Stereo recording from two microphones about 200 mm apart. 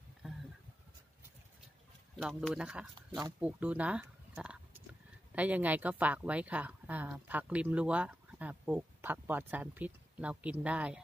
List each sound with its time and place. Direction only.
2.1 s speech: centre (ahead or behind)
3.1 s speech: 20° right (ahead or behind)
3.3 s speech: 5° right (ahead or behind)